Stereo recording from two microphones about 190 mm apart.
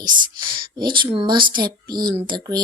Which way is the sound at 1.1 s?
25° right (ahead or behind).